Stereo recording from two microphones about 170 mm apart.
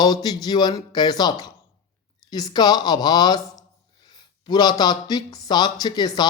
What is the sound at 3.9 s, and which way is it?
Speech, 25° left (ahead or behind).